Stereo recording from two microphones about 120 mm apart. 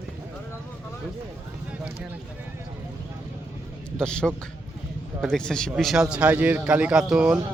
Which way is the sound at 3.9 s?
5° left (ahead or behind).